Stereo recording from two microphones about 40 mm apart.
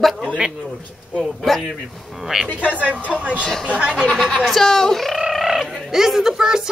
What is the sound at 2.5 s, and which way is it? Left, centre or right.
Speech, right.